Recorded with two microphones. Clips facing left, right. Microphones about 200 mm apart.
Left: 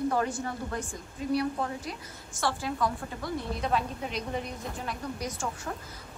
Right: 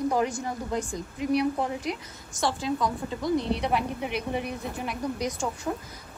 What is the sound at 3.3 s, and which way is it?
Speech, 85° right.